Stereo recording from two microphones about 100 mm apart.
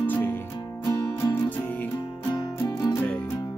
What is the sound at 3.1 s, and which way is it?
Music, 15° left (ahead or behind).